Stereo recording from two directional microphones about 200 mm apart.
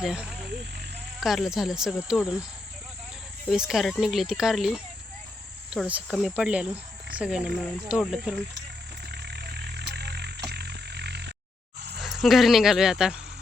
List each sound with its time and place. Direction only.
0.0 s speech: 5° right (ahead or behind)
3.5 s speech: centre (ahead or behind)
9.1 s a sound: 55° right (ahead or behind)
11.9 s speech: centre (ahead or behind)